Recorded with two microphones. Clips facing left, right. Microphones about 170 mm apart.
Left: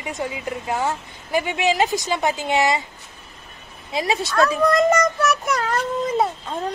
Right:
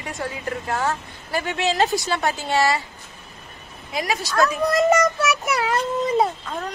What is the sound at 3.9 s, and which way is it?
Speech, 25° left (ahead or behind).